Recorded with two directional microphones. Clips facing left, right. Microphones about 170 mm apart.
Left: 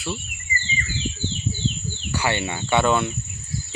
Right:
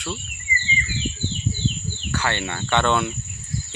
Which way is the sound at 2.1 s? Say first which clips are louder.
Left 1 dB; 10° left (ahead or behind).